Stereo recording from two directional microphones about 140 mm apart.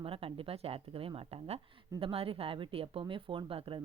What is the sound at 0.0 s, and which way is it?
Speech, 40° right (ahead or behind).